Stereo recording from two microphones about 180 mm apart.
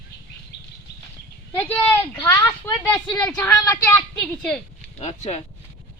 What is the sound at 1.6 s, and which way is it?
Speech, 10° left (ahead or behind).